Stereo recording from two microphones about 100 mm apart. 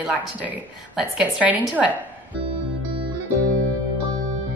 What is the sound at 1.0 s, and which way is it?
A woman's voice, 10° right (ahead or behind).